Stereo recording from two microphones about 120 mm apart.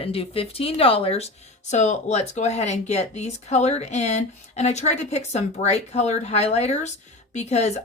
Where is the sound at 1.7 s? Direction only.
80° left.